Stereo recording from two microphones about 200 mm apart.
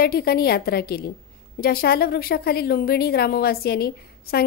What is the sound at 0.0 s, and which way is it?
A woman's voice, 50° left (ahead or behind).